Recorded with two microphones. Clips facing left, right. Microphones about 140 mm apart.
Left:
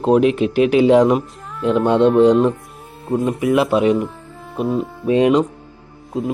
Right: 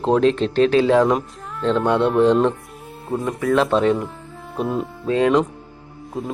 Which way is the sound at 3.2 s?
20° left (ahead or behind).